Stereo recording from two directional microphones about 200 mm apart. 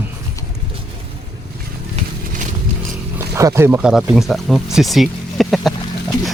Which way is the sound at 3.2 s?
15° right (ahead or behind).